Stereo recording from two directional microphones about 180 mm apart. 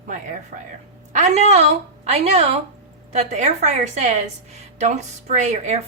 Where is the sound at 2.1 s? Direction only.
35° right (ahead or behind).